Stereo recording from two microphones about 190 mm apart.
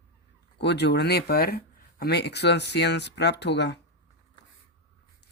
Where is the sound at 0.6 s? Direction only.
65° left (ahead or behind).